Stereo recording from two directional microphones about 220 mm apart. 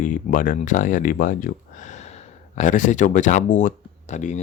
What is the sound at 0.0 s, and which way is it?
Speech, 35° left (ahead or behind).